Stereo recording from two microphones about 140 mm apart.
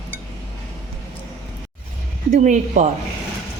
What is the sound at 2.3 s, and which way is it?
Speech, 65° right (ahead or behind).